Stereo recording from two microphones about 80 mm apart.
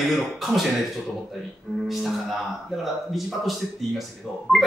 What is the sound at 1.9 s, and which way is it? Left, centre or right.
Speech, centre.